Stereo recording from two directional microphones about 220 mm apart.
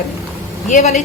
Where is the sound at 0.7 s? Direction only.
30° left (ahead or behind).